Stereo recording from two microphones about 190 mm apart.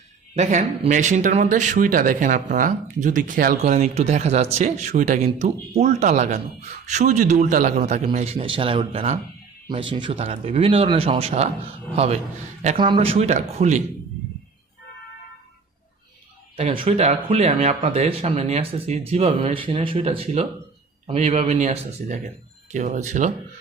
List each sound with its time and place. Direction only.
0.3 s speech: 40° right (ahead or behind)
16.6 s speech: 30° right (ahead or behind)